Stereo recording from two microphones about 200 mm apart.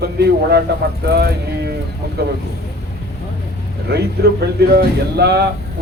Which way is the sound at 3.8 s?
55° right (ahead or behind).